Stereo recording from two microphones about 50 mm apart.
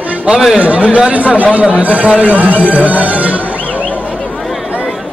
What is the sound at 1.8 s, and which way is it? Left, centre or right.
A man's voice, right.